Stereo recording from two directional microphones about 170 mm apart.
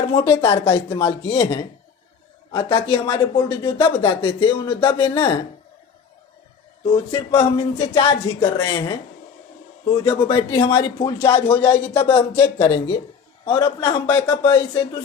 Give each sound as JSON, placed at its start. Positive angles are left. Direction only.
{"t": 0.1, "sound": "speech", "side_deg": 30}
{"t": 6.8, "sound": "speech", "side_deg": 25}